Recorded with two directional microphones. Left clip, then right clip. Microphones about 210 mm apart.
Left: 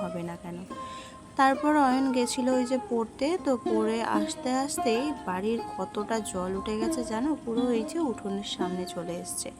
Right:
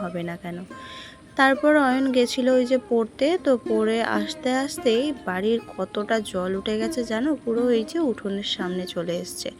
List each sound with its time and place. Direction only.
0.0 s speech: 15° right (ahead or behind)
1.6 s speech: 10° right (ahead or behind)